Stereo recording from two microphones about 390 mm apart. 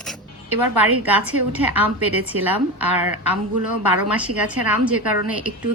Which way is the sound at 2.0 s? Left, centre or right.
Right.